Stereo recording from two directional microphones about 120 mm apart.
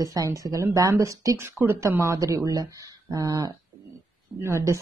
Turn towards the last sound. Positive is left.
turn(degrees=-25)  # may be behind; listen again after turning